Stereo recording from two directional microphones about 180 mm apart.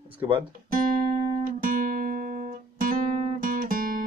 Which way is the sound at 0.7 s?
50° right (ahead or behind).